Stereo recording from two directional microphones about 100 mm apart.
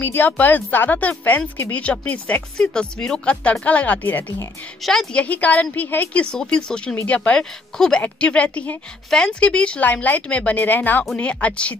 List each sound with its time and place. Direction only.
0.0 s a woman's voice: 20° left (ahead or behind)